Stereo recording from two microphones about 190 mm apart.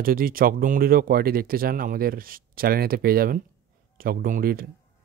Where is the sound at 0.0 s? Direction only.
50° right (ahead or behind).